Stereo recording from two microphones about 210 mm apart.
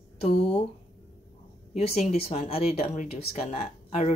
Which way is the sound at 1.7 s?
30° left (ahead or behind).